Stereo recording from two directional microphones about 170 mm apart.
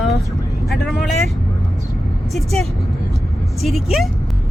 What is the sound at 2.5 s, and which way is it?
Speech, centre (ahead or behind).